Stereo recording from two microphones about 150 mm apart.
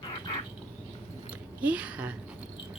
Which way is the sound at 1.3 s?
10° right (ahead or behind).